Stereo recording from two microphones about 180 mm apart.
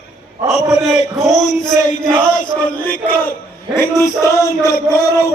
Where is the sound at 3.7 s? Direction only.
15° left (ahead or behind).